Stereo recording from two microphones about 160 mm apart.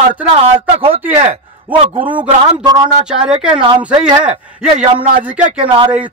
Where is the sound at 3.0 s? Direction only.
5° right (ahead or behind).